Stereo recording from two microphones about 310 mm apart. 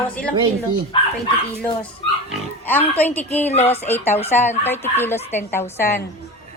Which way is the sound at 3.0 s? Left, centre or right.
Centre.